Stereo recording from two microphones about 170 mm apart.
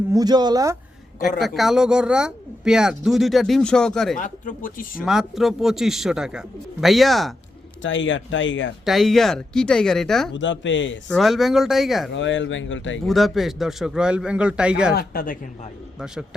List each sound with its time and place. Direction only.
0.1 s speech: 25° right (ahead or behind)
1.4 s speech: centre (ahead or behind)
4.2 s speech: 55° left (ahead or behind)
5.0 s speech: centre (ahead or behind)
7.8 s speech: 90° left
8.8 s speech: centre (ahead or behind)
10.3 s speech: 90° left
11.1 s speech: centre (ahead or behind)
12.1 s speech: 90° left
13.1 s speech: centre (ahead or behind)
14.9 s a man's voice: 60° left (ahead or behind)